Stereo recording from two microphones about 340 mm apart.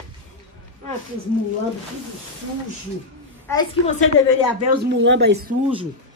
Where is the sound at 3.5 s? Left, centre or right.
Centre.